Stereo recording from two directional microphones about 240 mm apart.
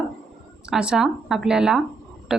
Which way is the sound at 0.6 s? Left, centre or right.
Centre.